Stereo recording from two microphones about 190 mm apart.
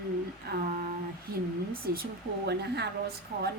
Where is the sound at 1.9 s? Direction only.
55° right (ahead or behind).